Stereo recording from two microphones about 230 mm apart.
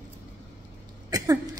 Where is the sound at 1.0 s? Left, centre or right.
Centre.